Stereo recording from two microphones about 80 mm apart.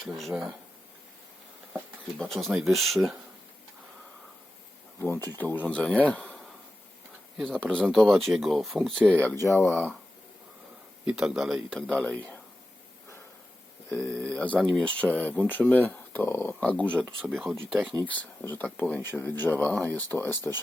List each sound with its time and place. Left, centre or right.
0.2 s speech: centre
2.1 s speech: centre
4.9 s speech: left; by 6.1 s centre
7.4 s speech: centre
9.0 s speech: left
9.4 s speech: left
11.0 s speech: centre
11.9 s speech: centre
13.9 s speech: centre
14.6 s speech: centre
14.8 s speech: centre
16.6 s speech: centre
17.1 s speech: centre
18.1 s speech: left